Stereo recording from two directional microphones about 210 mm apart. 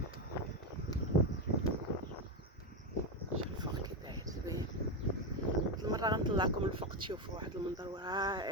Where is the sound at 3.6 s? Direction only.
20° right (ahead or behind).